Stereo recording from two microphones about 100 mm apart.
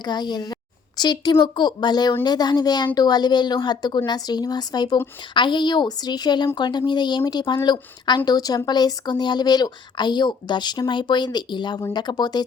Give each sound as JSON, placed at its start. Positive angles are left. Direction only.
{"t": 0.0, "sound": "speech", "side_deg": 45}